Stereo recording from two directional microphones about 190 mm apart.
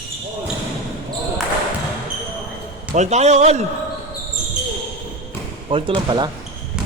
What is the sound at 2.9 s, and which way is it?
Speech, 35° right (ahead or behind).